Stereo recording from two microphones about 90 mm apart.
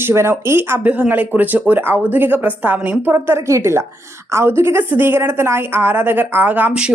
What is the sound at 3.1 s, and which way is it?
Speech, 30° right (ahead or behind).